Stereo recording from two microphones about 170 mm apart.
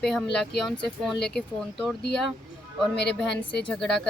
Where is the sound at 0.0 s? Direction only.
5° left (ahead or behind).